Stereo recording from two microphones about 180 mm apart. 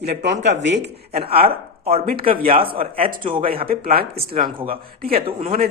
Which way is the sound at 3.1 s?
50° right (ahead or behind).